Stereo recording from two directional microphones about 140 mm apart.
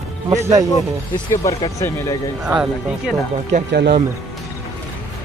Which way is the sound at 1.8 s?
20° left (ahead or behind).